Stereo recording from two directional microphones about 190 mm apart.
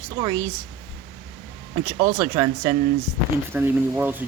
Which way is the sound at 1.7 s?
15° right (ahead or behind).